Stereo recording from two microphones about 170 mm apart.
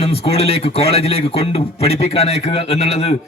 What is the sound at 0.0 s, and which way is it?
A man's voice, 35° left (ahead or behind).